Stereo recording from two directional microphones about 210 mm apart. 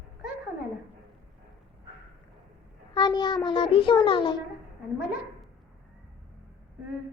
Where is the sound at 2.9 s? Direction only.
20° left (ahead or behind).